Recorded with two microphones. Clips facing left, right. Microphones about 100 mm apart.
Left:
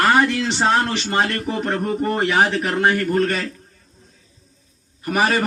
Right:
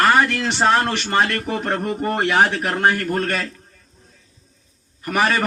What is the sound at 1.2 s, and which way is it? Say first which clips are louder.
Speech: right 1 dB; 70° right (ahead or behind).